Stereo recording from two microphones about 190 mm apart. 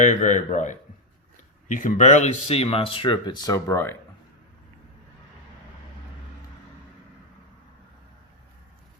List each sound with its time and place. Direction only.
0.0 s speech: 40° left (ahead or behind); by 3.9 s 15° left (ahead or behind)